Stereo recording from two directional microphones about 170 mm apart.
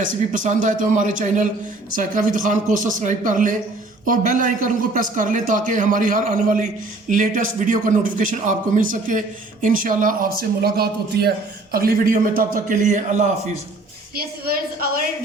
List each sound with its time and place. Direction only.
0.0 s a man's voice: 50° right (ahead or behind)